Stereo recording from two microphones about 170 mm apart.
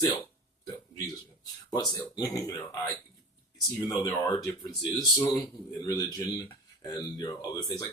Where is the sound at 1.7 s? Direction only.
25° left (ahead or behind).